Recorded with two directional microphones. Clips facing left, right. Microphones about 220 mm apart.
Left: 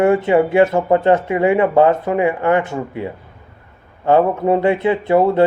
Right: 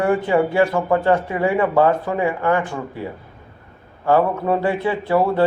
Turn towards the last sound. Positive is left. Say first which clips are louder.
# left 4 dB
turn(degrees=20)  # may be behind; listen again after turning